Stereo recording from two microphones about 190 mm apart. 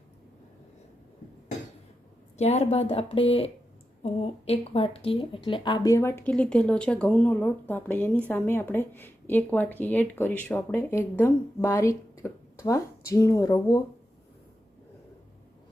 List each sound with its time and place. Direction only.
2.4 s a woman's voice: 35° left (ahead or behind); by 13.8 s 20° left (ahead or behind)